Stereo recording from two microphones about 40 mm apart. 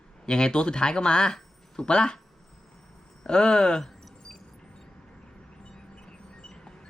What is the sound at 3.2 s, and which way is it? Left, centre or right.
Speech, centre.